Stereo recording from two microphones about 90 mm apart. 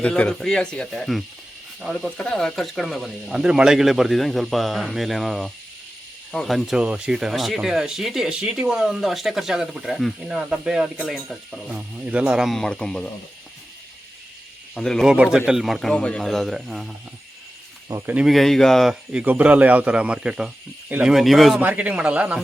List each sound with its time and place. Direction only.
0.0 s speech: 10° left (ahead or behind); by 12.5 s 10° right (ahead or behind)
12.5 s speech: 5° left (ahead or behind)
14.8 s speech: 5° left (ahead or behind)
15.0 s speech: 10° right (ahead or behind)
16.0 s speech: 10° left (ahead or behind)
18.0 s speech: 15° right (ahead or behind)
18.3 s speech: centre (ahead or behind)
19.1 s speech: 15° right (ahead or behind); by 21.6 s centre (ahead or behind)
21.6 s speech: 15° right (ahead or behind)